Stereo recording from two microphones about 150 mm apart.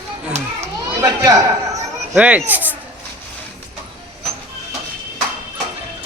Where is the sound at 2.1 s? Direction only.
10° right (ahead or behind).